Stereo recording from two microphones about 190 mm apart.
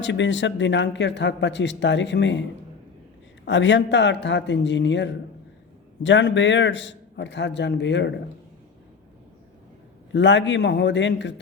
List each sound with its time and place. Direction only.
0.0 s a man's voice: 70° left (ahead or behind)
3.4 s a man's voice: 70° left (ahead or behind)
10.1 s a man's voice: 70° left (ahead or behind)